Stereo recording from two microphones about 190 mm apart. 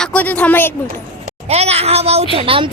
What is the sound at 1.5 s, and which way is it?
Speech, 35° right (ahead or behind).